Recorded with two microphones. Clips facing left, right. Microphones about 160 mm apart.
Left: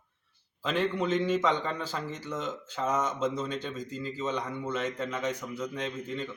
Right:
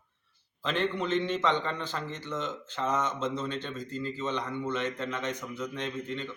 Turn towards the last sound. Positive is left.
turn(degrees=10)  # may be behind; listen again after turning